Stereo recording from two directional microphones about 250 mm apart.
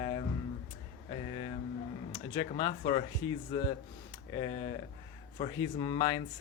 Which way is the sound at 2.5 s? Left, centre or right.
Centre.